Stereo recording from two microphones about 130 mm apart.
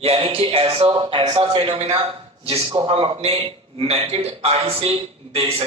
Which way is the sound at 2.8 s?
45° right (ahead or behind).